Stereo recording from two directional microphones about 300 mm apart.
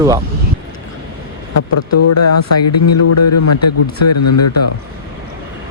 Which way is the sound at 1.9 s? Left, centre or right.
Left.